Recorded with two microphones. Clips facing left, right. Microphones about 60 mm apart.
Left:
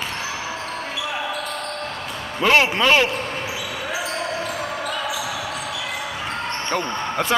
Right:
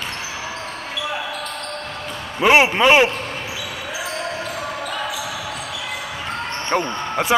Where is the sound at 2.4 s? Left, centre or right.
Centre.